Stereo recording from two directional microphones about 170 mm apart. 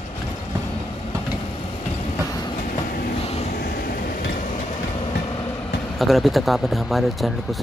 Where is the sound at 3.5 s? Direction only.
60° left (ahead or behind).